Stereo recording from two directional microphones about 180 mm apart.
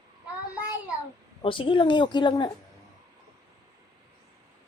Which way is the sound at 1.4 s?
30° left (ahead or behind).